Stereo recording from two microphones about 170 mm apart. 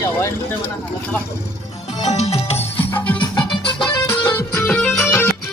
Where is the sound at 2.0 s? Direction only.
40° left (ahead or behind).